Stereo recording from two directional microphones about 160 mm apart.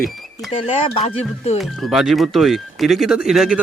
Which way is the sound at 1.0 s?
45° left (ahead or behind).